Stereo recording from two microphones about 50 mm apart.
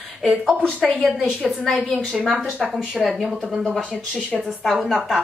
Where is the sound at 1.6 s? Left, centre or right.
Centre.